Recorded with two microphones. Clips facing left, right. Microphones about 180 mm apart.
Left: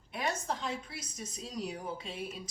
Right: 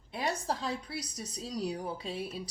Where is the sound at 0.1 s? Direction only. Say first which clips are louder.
Right 2 dB; 30° right (ahead or behind).